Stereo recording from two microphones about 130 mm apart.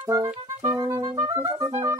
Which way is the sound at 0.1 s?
25° right (ahead or behind).